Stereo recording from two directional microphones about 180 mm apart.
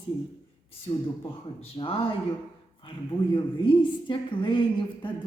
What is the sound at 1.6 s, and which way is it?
Speech, 30° left (ahead or behind).